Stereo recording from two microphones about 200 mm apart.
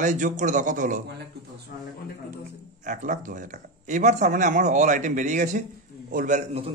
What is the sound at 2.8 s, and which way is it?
A man's voice, 40° right (ahead or behind).